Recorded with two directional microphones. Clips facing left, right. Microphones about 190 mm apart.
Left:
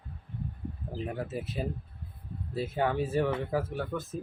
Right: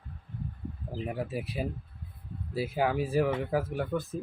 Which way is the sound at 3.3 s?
15° right (ahead or behind).